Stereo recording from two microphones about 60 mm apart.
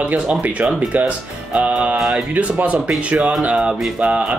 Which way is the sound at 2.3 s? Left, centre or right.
Right.